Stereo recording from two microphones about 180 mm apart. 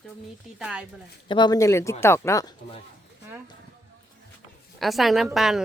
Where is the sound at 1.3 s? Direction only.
25° left (ahead or behind).